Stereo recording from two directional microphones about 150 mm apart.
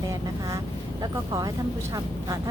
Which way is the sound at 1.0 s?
25° right (ahead or behind).